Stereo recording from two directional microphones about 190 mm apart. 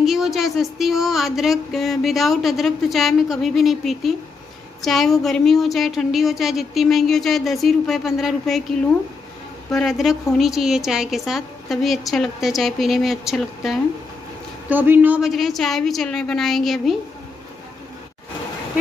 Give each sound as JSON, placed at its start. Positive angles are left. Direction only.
{"t": 0.0, "sound": "speech", "side_deg": 0}
{"t": 9.7, "sound": "speech", "side_deg": 0}